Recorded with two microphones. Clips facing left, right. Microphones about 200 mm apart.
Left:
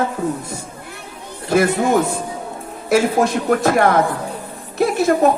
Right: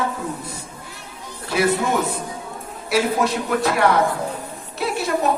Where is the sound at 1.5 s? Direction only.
50° left (ahead or behind).